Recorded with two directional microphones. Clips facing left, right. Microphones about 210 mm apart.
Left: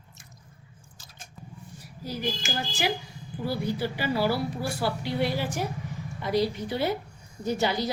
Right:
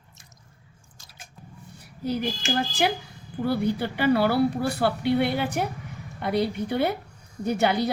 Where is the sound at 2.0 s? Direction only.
60° right (ahead or behind).